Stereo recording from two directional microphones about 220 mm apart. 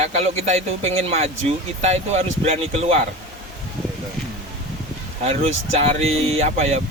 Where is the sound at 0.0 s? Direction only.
30° right (ahead or behind).